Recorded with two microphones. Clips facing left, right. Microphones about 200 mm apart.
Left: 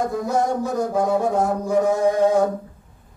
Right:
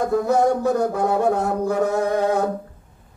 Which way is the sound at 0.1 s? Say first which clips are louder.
Right 4 dB; 60° right (ahead or behind).